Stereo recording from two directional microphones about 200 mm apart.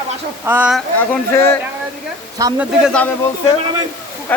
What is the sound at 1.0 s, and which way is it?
Speech, 10° left (ahead or behind).